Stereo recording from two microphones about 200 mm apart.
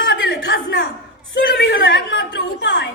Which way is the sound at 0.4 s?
55° left (ahead or behind).